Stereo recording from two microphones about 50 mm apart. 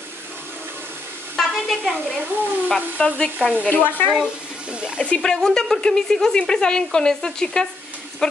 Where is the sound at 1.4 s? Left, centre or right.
Centre.